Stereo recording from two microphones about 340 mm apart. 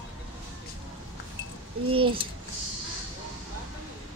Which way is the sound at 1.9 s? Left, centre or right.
Centre.